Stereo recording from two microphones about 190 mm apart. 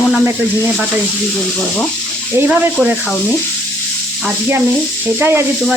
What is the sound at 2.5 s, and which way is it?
Speech, centre (ahead or behind).